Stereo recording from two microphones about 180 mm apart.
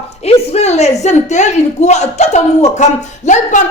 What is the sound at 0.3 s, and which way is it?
A woman's voice, 35° left (ahead or behind).